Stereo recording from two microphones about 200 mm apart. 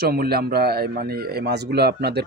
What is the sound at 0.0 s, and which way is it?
Speech, 50° right (ahead or behind).